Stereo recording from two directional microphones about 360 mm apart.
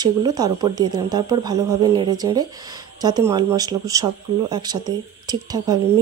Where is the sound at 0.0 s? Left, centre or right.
Centre.